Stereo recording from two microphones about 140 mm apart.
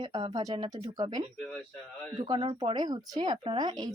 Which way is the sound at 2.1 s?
30° right (ahead or behind).